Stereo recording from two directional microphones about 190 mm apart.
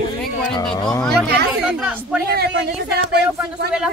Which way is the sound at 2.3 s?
60° right (ahead or behind).